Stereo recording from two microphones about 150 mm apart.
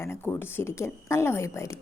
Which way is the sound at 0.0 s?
15° left (ahead or behind).